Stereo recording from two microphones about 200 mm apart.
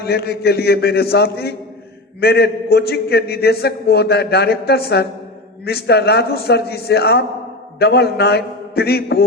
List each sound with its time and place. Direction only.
0.0 s a man's voice: 55° left (ahead or behind)